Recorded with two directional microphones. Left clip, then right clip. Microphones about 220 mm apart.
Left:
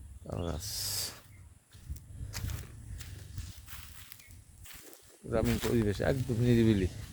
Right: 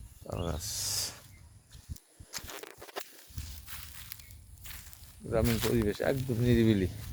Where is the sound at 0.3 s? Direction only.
10° left (ahead or behind).